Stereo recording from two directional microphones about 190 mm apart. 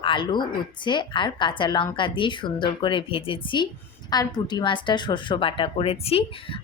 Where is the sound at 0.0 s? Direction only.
25° left (ahead or behind).